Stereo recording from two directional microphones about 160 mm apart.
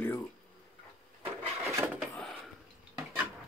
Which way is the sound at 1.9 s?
5° left (ahead or behind).